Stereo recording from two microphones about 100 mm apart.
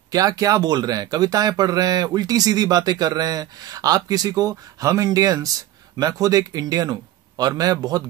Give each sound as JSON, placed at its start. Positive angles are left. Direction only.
{"t": 0.1, "sound": "speech", "side_deg": -35}